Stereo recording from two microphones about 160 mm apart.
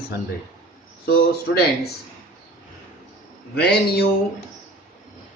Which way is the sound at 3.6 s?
90° left.